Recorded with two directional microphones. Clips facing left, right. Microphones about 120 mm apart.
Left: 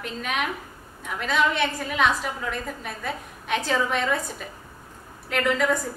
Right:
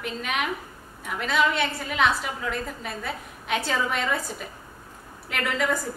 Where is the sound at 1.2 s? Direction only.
5° right (ahead or behind).